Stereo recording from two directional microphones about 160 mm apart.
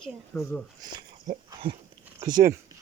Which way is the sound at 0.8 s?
25° right (ahead or behind).